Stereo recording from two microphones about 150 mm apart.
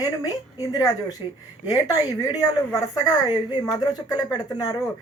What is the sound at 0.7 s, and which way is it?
Speech, 25° left (ahead or behind).